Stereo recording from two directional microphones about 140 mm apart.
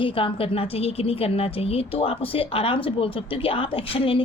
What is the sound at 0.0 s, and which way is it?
A woman's voice, 40° left (ahead or behind).